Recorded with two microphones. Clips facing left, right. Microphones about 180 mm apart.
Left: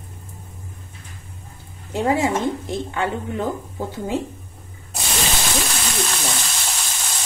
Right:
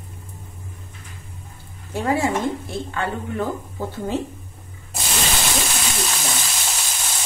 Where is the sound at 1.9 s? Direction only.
15° left (ahead or behind).